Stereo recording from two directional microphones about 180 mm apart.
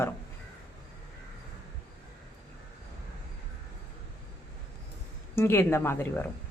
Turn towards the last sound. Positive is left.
turn(degrees=10)  # may be behind; listen again after turning